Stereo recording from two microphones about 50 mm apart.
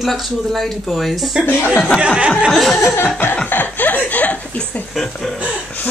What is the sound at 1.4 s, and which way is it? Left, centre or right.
Speech, left.